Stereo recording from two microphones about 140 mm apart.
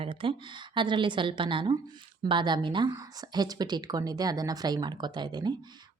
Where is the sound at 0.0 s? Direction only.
40° right (ahead or behind).